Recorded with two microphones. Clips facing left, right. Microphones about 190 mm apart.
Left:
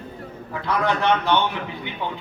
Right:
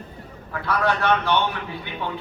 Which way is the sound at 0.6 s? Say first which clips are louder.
Left 1 dB; 15° left (ahead or behind).